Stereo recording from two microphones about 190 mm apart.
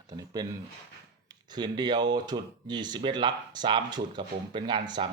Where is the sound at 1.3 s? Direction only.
20° right (ahead or behind).